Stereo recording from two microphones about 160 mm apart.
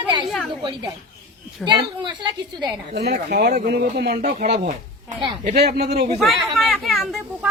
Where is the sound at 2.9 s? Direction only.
85° right.